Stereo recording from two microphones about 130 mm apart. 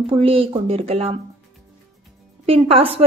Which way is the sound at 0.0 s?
45° right (ahead or behind).